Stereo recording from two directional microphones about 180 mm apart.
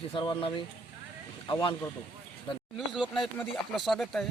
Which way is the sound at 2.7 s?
Centre (ahead or behind).